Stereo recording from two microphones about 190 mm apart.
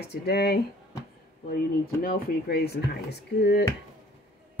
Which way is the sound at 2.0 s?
50° left (ahead or behind).